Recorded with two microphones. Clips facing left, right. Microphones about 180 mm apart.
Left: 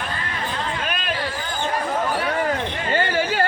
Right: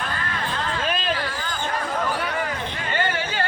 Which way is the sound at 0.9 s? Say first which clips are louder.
Right 3 dB; 30° right (ahead or behind).